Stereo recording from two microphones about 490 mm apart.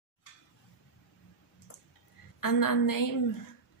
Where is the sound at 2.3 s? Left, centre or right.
Left.